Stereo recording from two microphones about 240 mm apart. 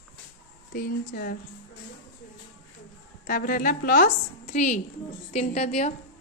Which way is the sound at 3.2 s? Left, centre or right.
Left.